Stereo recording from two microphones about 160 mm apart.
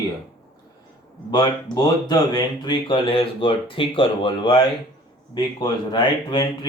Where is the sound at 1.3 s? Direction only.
25° left (ahead or behind).